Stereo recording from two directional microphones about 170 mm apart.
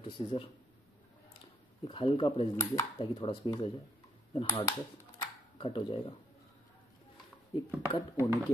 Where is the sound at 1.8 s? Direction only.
30° left (ahead or behind).